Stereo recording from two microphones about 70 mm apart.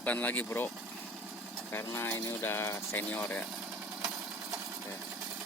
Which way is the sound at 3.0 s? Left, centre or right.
Left.